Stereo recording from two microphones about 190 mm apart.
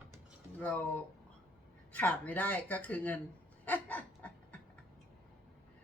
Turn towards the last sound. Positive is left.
turn(degrees=10)  # may be behind; listen again after turning